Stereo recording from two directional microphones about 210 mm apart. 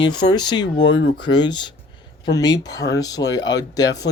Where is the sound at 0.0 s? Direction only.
20° left (ahead or behind).